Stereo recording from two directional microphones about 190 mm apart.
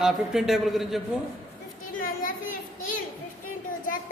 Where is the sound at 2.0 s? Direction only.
50° left (ahead or behind).